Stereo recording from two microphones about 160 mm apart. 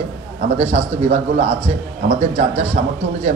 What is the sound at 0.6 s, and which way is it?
A man's voice, 45° right (ahead or behind).